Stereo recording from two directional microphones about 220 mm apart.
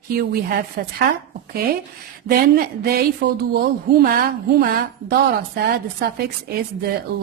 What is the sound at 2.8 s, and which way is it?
A woman's voice, 45° right (ahead or behind).